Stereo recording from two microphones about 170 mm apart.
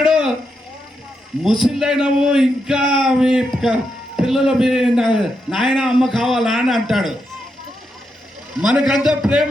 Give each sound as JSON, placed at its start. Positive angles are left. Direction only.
{"t": 0.0, "sound": "a sound", "side_deg": -5}
{"t": 1.5, "sound": "a man's voice", "side_deg": 0}
{"t": 8.6, "sound": "a man's voice", "side_deg": -5}